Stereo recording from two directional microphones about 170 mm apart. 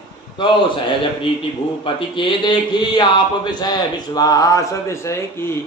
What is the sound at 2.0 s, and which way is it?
Speech, 30° left (ahead or behind).